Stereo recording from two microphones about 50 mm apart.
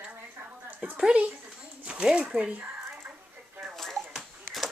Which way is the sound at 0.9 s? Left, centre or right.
Right.